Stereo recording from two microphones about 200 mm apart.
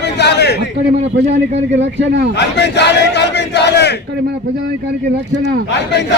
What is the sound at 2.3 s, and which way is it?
Speech, 60° left (ahead or behind).